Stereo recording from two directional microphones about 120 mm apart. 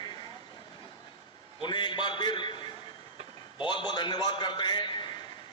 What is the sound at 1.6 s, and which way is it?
A man's voice, 40° left (ahead or behind).